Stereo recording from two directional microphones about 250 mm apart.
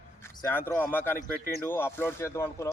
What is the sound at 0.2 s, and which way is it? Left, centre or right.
Speech, centre.